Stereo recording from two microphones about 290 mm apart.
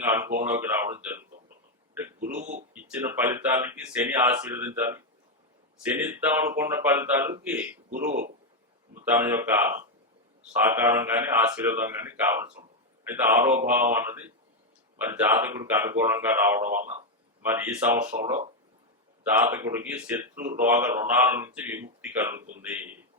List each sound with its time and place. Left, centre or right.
0.0 s a man's voice: centre
2.0 s a sound: centre
2.3 s a sound: right
2.7 s a man's voice: centre
5.8 s a man's voice: centre
9.1 s a man's voice: centre